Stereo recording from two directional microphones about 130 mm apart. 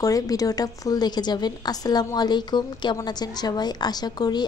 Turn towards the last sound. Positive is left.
turn(degrees=30)  # may be behind; listen again after turning